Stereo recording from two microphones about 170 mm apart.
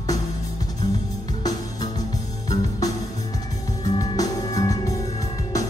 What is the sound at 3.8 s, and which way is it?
Music, 25° left (ahead or behind).